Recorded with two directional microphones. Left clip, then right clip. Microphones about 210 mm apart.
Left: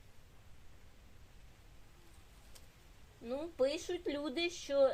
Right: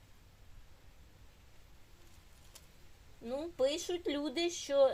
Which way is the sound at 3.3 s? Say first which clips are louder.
Right 1 dB; 20° right (ahead or behind).